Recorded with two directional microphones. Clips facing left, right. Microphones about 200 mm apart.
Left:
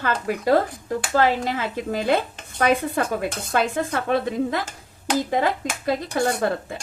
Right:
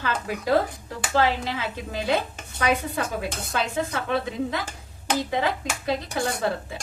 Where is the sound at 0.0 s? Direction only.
50° left (ahead or behind).